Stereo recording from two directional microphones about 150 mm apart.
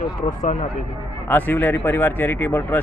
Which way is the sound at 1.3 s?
15° left (ahead or behind).